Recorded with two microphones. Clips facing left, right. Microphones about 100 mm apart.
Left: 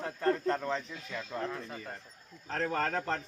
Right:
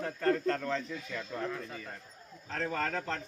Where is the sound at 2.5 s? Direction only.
40° left (ahead or behind).